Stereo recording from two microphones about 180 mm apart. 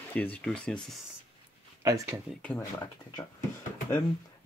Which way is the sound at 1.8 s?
15° right (ahead or behind).